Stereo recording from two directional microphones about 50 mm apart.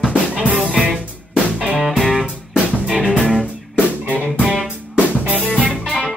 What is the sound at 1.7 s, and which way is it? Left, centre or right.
Music, centre.